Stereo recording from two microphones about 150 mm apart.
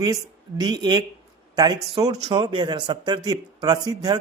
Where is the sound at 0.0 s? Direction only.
25° right (ahead or behind).